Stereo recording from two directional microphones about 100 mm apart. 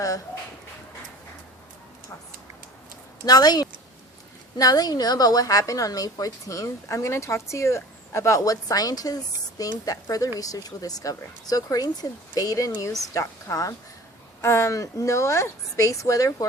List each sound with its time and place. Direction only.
3.2 s a woman's voice: 40° left (ahead or behind)